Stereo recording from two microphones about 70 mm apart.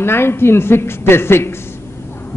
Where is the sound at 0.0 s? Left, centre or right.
Left.